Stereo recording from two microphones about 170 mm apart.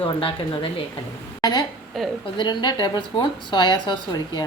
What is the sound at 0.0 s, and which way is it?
Speech, 30° left (ahead or behind).